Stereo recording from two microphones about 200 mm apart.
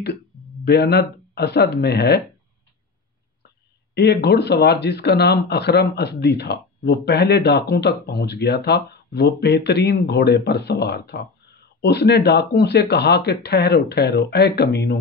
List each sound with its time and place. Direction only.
0.7 s speech: 55° left (ahead or behind)
3.9 s speech: 55° left (ahead or behind)